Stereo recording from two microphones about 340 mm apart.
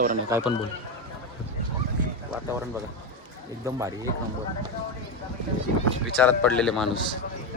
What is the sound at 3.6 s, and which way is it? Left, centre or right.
Speech, centre.